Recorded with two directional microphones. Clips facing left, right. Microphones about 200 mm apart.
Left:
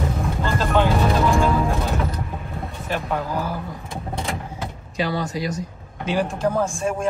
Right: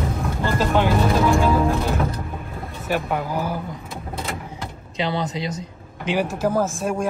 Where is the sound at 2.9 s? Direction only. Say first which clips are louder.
Right 2 dB; 10° right (ahead or behind).